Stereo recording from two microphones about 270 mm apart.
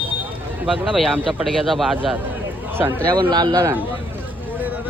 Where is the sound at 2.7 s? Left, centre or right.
Centre.